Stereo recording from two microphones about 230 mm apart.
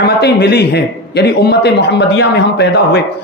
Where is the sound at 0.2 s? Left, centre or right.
Left.